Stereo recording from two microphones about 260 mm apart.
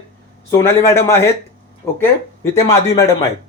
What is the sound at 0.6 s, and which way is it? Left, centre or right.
Speech, centre.